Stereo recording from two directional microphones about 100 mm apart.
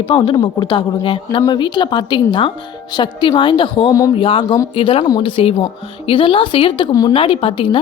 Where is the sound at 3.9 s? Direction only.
35° left (ahead or behind).